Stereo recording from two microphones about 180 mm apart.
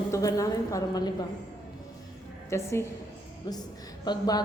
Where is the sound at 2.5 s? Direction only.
15° left (ahead or behind).